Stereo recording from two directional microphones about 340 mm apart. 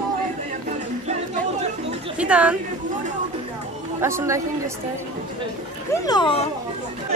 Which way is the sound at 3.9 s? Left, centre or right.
Centre.